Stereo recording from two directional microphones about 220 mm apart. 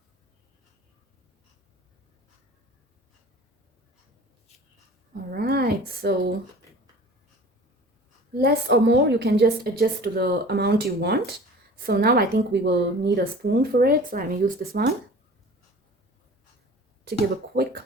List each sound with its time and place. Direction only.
5.3 s a sound: 45° right (ahead or behind)
8.4 s a woman's voice: 50° right (ahead or behind)
17.1 s a woman's voice: 45° right (ahead or behind)